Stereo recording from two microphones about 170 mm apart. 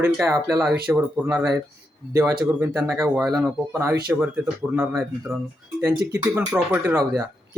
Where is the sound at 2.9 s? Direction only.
Centre (ahead or behind).